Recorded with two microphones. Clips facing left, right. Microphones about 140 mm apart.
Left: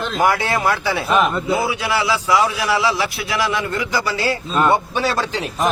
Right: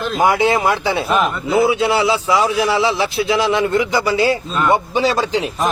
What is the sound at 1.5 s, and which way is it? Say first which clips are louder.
A man's voice: right 5 dB; 25° right (ahead or behind).